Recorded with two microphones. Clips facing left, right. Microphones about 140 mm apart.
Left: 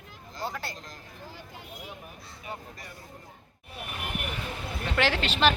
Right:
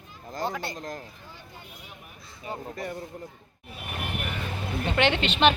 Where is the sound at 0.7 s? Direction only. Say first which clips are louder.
Right 10 dB; 50° right (ahead or behind).